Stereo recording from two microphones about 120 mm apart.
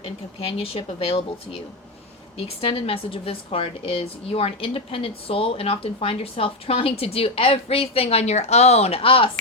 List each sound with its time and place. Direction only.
0.0 s a woman's voice: 50° left (ahead or behind)